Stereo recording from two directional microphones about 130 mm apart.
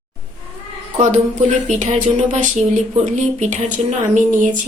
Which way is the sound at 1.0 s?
70° right (ahead or behind).